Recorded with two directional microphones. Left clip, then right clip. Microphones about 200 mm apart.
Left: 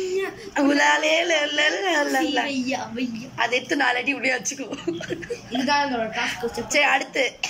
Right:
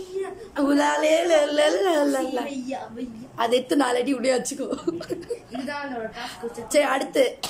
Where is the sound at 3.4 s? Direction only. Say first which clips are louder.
Even; 25° right (ahead or behind).